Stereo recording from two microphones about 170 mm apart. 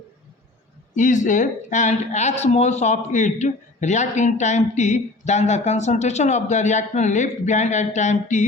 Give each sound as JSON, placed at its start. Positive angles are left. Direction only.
{"t": 0.9, "sound": "speech", "side_deg": 50}